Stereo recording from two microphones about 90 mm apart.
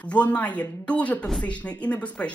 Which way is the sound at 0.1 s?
15° left (ahead or behind).